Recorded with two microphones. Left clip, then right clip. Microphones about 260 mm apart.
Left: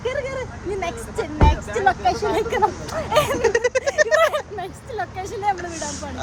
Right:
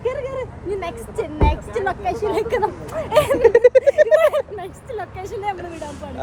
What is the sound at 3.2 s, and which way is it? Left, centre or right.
Speech, centre.